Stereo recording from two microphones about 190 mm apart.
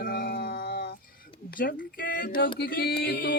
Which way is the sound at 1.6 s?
50° left (ahead or behind).